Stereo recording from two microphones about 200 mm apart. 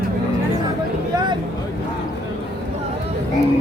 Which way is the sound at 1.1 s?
20° right (ahead or behind).